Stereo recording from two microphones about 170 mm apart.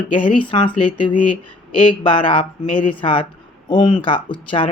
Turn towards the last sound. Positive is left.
turn(degrees=30)  # may be behind; listen again after turning